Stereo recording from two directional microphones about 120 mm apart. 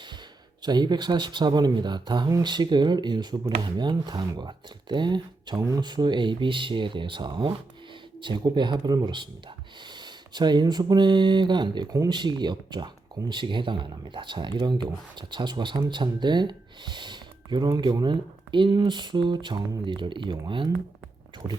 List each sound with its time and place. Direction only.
0.6 s speech: 35° right (ahead or behind)
21.4 s speech: 20° right (ahead or behind)